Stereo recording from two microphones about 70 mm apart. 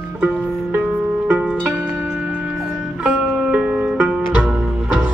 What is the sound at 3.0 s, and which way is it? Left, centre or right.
Music, centre.